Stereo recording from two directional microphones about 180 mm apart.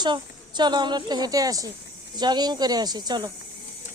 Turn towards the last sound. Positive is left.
turn(degrees=-25)  # may be behind; listen again after turning